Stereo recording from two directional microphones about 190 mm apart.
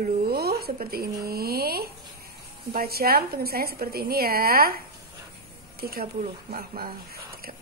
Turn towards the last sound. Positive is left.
turn(degrees=-50)  # may be behind; listen again after turning